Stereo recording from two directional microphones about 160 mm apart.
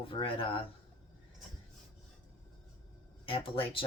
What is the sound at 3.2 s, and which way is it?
Speech, 35° left (ahead or behind).